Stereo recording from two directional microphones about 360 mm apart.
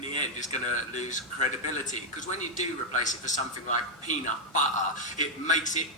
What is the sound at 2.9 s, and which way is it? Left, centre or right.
Speech, left.